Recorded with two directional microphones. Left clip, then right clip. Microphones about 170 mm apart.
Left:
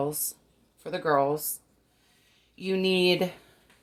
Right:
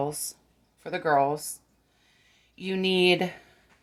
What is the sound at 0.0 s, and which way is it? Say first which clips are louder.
Speech: even; 25° right (ahead or behind).